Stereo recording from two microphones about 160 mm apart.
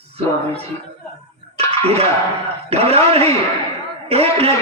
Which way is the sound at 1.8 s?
40° right (ahead or behind).